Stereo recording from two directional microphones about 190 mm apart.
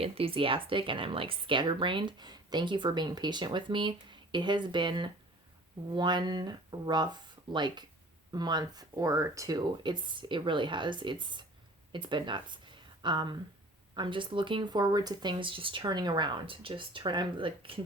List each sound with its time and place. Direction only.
0.0 s speech: 30° right (ahead or behind)